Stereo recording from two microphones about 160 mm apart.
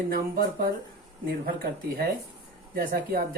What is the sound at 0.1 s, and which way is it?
Speech, 65° right (ahead or behind).